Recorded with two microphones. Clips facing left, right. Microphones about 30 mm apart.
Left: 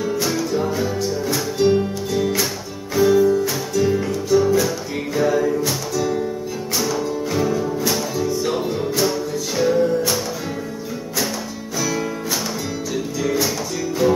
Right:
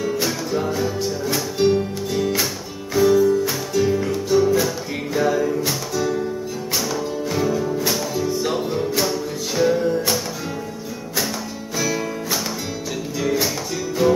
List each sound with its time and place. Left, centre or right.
0.2 s music: centre
0.7 s music: centre
1.6 s music: centre
2.1 s music: centre
3.4 s music: centre
7.0 s music: centre
8.3 s music: centre
9.0 s music: centre
11.8 s music: centre
13.2 s music: centre